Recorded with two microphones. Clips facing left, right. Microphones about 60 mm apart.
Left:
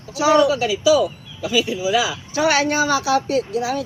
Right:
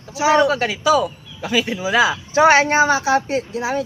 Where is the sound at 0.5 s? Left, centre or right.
Right.